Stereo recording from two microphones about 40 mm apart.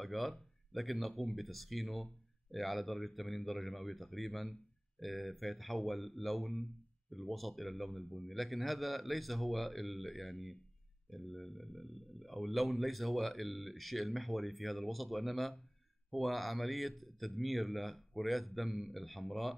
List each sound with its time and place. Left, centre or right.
0.0 s speech: centre